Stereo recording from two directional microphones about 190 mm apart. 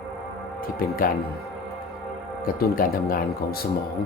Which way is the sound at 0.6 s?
50° left (ahead or behind).